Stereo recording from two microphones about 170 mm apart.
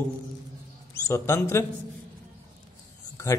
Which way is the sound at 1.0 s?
15° left (ahead or behind).